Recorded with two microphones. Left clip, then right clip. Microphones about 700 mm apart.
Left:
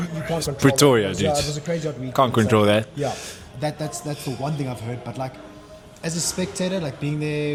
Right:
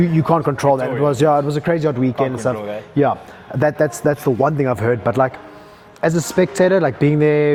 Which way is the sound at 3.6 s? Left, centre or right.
Right.